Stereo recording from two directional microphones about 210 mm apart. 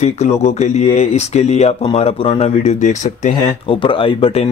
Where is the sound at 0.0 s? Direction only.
30° left (ahead or behind).